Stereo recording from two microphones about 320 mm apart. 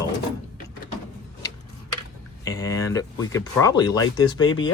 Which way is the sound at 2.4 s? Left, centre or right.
Centre.